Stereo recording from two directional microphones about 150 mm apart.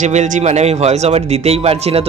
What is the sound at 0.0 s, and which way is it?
Speech, 55° right (ahead or behind).